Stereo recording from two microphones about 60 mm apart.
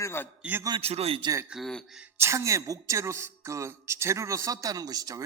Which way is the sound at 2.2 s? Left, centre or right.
Right.